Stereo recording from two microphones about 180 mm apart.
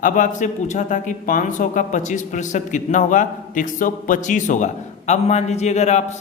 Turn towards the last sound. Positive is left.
turn(degrees=40)  # may be behind; listen again after turning